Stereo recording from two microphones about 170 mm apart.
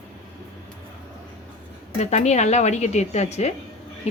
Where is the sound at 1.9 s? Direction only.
40° left (ahead or behind).